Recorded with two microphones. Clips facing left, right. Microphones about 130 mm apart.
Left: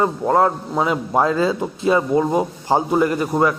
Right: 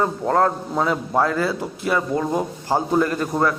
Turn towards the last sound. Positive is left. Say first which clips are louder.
# left 3 dB
turn(degrees=15)  # may be behind; listen again after turning